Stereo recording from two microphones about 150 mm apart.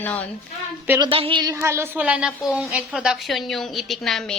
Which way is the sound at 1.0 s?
35° right (ahead or behind).